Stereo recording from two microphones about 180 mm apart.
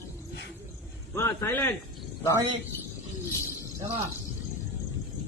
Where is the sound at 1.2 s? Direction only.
15° left (ahead or behind).